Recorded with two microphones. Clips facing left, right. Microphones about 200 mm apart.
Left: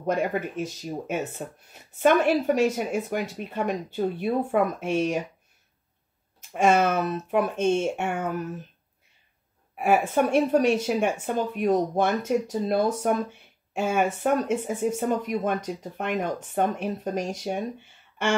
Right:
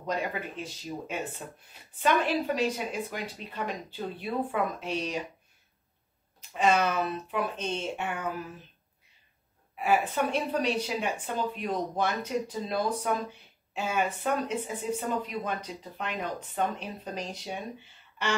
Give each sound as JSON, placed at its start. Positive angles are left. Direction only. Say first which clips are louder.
{"t": 0.0, "sound": "speech", "louder": "left 7 dB", "side_deg": 50}
{"t": 6.5, "sound": "speech", "louder": "left 5 dB", "side_deg": 50}
{"t": 9.8, "sound": "speech", "louder": "left 5 dB", "side_deg": 50}